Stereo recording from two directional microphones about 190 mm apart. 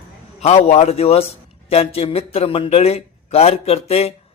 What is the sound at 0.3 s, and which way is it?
A man's voice, 35° left (ahead or behind).